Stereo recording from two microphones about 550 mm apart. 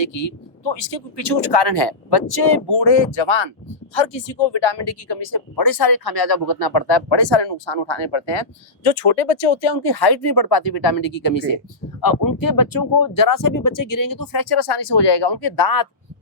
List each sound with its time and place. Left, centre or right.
0.0 s speech: left
9.8 s speech: left